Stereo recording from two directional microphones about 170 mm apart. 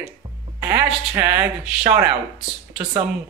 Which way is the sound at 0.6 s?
15° right (ahead or behind).